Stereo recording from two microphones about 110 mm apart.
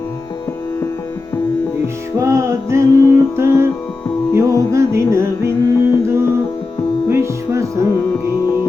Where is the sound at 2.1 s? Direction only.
25° right (ahead or behind).